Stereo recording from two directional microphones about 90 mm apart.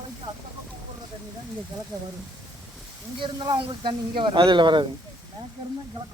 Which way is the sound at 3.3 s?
55° right (ahead or behind).